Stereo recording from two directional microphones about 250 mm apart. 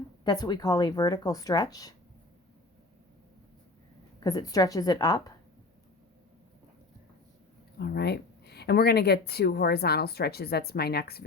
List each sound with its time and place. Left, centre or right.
0.3 s speech: centre
4.2 s speech: centre
7.8 s speech: left